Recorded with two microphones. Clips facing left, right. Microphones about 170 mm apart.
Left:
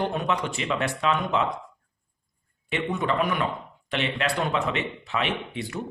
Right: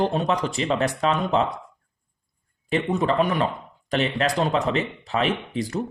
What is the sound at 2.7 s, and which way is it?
A man's voice, 35° right (ahead or behind).